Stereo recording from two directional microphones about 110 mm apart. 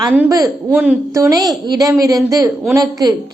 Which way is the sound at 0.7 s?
10° right (ahead or behind).